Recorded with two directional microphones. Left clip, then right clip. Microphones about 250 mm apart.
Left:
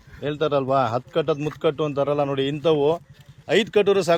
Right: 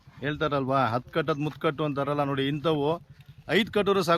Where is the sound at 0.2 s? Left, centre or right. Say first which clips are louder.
Left 5 dB; centre.